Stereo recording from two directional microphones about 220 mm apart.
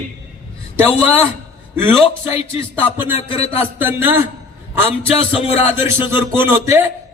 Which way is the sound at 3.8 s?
10° right (ahead or behind).